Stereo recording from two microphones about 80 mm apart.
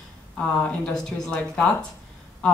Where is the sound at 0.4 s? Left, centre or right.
Centre.